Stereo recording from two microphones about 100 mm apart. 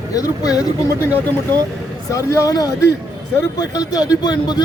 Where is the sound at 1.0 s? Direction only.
25° left (ahead or behind).